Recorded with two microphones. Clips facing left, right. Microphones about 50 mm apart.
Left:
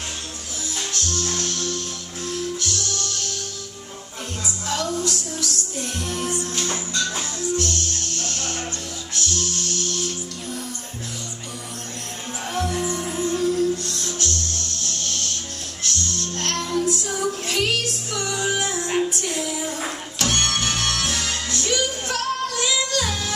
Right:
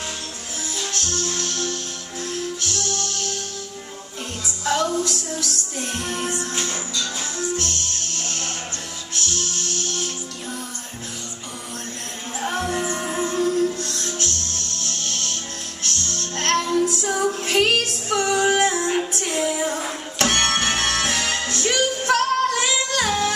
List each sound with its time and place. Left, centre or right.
0.9 s music: right
4.6 s music: right
12.4 s music: right